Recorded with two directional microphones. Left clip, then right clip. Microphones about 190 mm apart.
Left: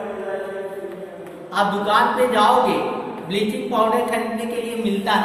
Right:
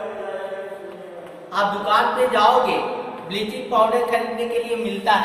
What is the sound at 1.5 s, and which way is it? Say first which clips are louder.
A woman's voice: left 1 dB; 15° right (ahead or behind).